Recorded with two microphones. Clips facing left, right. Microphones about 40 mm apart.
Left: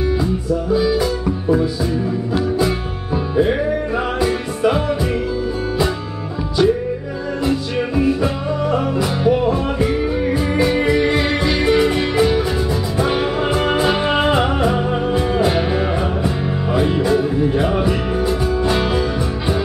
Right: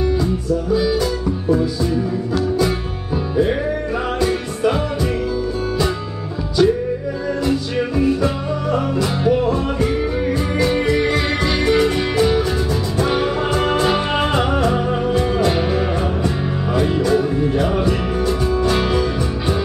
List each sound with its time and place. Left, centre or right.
0.0 s music: centre
4.2 s music: centre
6.6 s music: centre